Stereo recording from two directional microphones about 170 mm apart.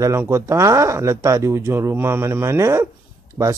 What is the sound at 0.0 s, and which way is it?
Speech, 15° right (ahead or behind).